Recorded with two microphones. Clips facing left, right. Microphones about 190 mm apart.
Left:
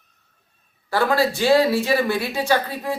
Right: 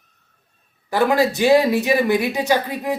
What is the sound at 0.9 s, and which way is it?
Speech, 20° right (ahead or behind).